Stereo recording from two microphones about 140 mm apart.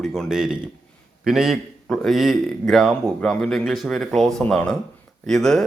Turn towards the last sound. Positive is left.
turn(degrees=5)  # may be behind; listen again after turning